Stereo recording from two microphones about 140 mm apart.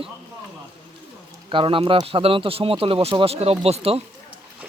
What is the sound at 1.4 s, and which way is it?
A man's voice, 40° right (ahead or behind).